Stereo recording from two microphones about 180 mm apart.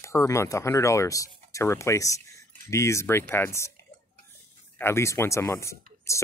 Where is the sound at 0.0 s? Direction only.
15° left (ahead or behind).